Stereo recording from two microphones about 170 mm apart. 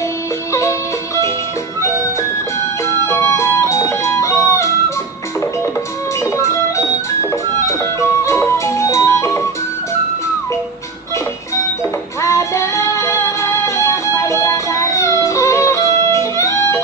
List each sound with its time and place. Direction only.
0.5 s music: 15° left (ahead or behind)
3.1 s music: 15° left (ahead or behind)
6.3 s music: 15° left (ahead or behind)
8.2 s music: 15° left (ahead or behind)
12.2 s music: 15° left (ahead or behind)